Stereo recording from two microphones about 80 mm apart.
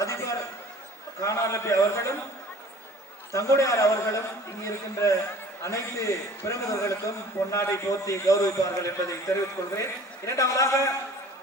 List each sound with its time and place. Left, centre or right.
0.0 s a sound: left
1.2 s a man's voice: left
3.3 s a man's voice: left